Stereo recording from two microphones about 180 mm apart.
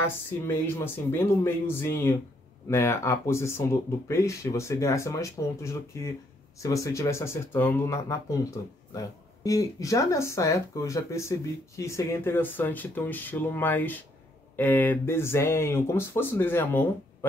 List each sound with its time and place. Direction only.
0.0 s speech: 15° left (ahead or behind)